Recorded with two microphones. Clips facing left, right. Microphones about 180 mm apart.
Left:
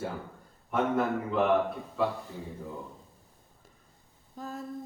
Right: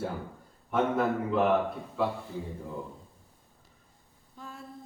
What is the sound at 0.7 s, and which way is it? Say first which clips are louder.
Speech: right 1 dB; centre (ahead or behind).